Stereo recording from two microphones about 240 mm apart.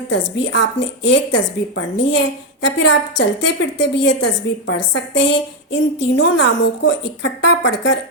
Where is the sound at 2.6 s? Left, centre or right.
Left.